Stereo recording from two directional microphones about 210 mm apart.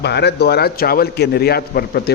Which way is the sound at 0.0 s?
55° left (ahead or behind).